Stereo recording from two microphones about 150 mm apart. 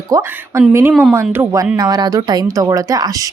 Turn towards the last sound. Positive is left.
turn(degrees=-25)  # may be behind; listen again after turning